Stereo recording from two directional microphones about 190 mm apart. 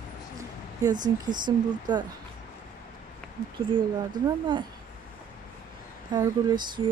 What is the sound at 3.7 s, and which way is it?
Speech, 25° right (ahead or behind).